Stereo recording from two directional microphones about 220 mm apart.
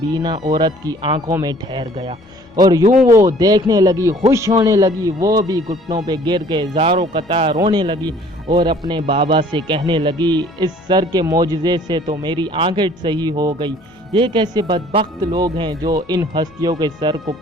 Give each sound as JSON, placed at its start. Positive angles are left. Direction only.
{"t": 0.1, "sound": "speech", "side_deg": -15}
{"t": 2.8, "sound": "speech", "side_deg": -35}
{"t": 3.1, "sound": "speech", "side_deg": -15}